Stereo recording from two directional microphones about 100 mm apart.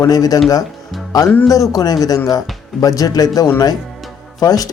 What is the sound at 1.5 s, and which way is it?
Speech, 35° left (ahead or behind).